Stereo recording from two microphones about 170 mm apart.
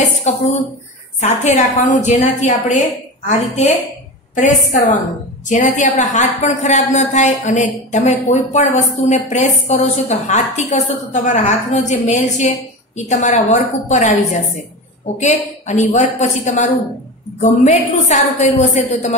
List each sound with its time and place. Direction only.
0.3 s a woman's voice: 40° left (ahead or behind)